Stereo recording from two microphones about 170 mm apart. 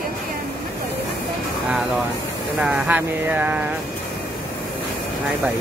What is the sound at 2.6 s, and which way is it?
Speech, 10° right (ahead or behind).